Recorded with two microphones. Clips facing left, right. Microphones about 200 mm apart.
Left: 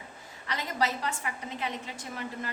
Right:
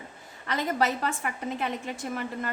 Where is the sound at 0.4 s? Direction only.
50° right (ahead or behind).